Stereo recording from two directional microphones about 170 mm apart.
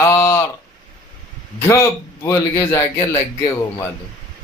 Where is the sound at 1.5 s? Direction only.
15° left (ahead or behind).